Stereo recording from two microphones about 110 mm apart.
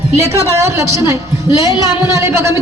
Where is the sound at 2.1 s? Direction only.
25° right (ahead or behind).